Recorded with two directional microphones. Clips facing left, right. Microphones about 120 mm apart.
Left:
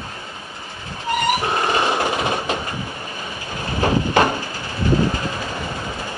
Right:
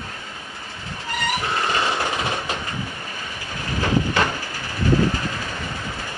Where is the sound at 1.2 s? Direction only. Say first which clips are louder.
Left 3 dB; 20° left (ahead or behind).